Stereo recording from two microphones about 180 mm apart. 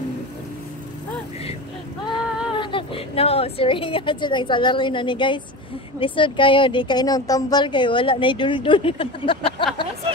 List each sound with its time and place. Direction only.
2.5 s a woman's voice: 25° left (ahead or behind)